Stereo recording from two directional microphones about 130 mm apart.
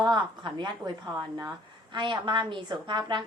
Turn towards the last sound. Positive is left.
turn(degrees=-35)  # may be behind; listen again after turning